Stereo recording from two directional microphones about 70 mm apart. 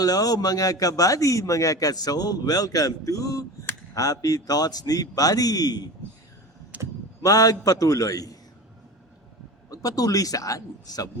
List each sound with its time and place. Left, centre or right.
0.0 s a man's voice: left
6.7 s a sound: right
7.2 s a man's voice: left
9.6 s a man's voice: left